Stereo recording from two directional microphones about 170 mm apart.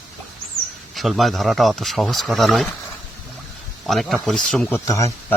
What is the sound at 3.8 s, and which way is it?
Speech, centre (ahead or behind).